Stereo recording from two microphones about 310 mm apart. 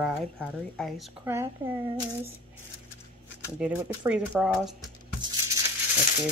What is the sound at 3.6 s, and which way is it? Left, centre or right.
Speech, centre.